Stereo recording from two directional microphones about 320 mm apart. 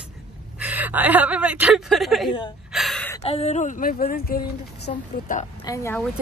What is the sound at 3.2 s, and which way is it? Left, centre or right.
Speech, centre.